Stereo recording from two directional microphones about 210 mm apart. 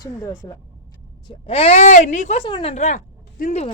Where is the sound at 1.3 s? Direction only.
25° left (ahead or behind).